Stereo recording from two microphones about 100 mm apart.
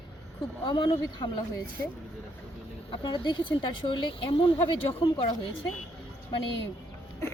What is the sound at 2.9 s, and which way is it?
A woman's voice, 50° left (ahead or behind).